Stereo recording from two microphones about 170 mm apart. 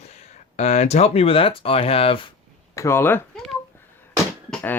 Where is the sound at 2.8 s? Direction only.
15° left (ahead or behind).